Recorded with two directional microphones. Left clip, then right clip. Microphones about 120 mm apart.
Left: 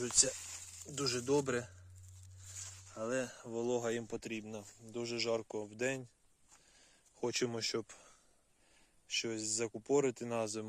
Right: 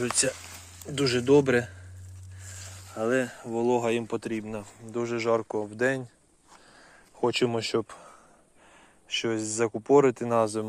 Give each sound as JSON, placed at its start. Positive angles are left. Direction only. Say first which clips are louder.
{"t": 0.0, "sound": "speech", "louder": "right 7 dB", "side_deg": 25}
{"t": 0.9, "sound": "speech", "louder": "right 13 dB", "side_deg": 15}
{"t": 2.9, "sound": "speech", "louder": "right 12 dB", "side_deg": 25}
{"t": 3.2, "sound": "speech", "louder": "right 11 dB", "side_deg": 40}
{"t": 6.7, "sound": "a sound", "louder": "right 12 dB", "side_deg": 35}
{"t": 9.1, "sound": "speech", "louder": "right 10 dB", "side_deg": 25}